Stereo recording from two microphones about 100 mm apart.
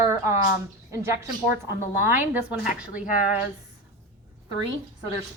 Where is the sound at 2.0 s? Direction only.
15° right (ahead or behind).